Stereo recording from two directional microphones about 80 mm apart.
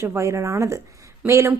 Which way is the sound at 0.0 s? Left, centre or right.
Right.